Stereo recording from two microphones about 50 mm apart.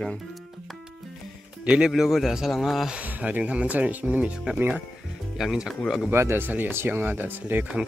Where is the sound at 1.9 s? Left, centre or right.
Centre.